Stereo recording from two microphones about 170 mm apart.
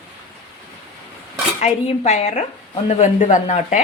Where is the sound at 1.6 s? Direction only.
40° left (ahead or behind).